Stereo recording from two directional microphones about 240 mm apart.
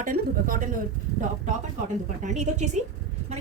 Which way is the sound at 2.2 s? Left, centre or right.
Right.